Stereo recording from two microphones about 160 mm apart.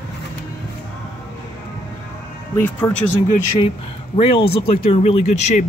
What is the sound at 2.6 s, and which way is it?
Speech, 10° left (ahead or behind).